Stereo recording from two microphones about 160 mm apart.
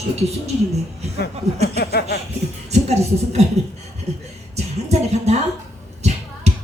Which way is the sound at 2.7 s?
45° right (ahead or behind).